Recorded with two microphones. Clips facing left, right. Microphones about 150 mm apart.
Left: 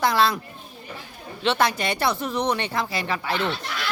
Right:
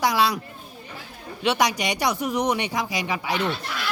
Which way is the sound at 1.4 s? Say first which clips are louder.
Even; 15° right (ahead or behind).